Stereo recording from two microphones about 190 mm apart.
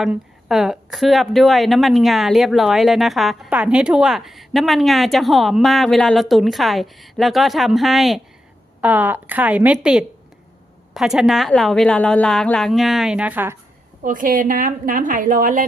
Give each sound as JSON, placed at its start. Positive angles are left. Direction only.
{"t": 0.0, "sound": "a woman's voice", "side_deg": 0}
{"t": 14.0, "sound": "a woman's voice", "side_deg": -45}